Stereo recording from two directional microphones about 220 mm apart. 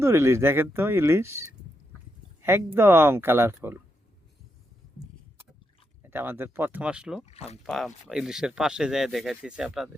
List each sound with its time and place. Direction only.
0.0 s speech: 10° right (ahead or behind)
6.0 s speech: 10° right (ahead or behind)
7.3 s speech: 30° left (ahead or behind)
7.6 s speech: centre (ahead or behind)